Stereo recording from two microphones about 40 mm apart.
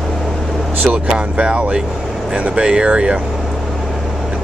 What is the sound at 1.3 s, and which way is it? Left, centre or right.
Speech, right.